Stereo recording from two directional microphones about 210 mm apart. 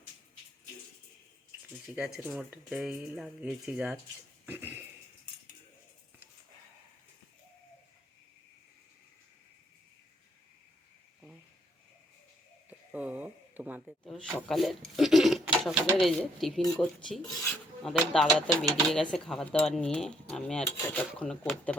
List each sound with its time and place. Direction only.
2.0 s speech: centre (ahead or behind)
4.4 s a sound: 10° right (ahead or behind)
12.9 s a sound: 5° right (ahead or behind)
14.0 s speech: 5° left (ahead or behind)
16.6 s speech: 15° left (ahead or behind)
17.8 s speech: centre (ahead or behind)